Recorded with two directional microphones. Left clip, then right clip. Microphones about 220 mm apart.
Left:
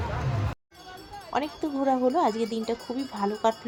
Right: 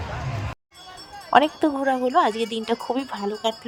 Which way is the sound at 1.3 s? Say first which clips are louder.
Right 11 dB; 35° right (ahead or behind).